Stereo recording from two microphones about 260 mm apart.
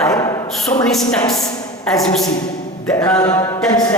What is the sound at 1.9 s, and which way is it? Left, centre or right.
A man's voice, centre.